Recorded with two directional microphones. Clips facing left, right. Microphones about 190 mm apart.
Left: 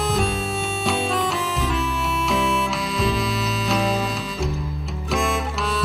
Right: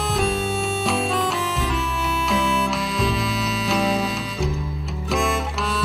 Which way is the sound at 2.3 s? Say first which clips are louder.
Even; centre (ahead or behind).